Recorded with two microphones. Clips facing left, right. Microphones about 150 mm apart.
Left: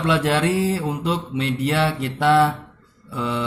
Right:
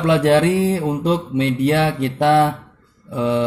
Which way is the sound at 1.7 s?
45° right (ahead or behind).